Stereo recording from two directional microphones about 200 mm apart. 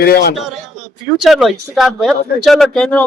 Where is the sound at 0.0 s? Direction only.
50° left (ahead or behind).